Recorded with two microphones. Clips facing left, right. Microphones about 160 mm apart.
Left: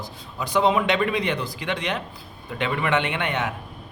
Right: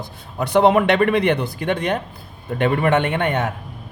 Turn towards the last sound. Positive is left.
turn(degrees=-45)  # may be behind; listen again after turning